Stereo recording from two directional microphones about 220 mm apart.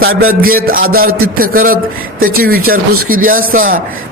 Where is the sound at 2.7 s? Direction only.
85° right.